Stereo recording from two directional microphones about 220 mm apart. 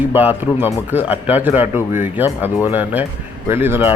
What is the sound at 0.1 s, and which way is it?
Speech, 10° right (ahead or behind).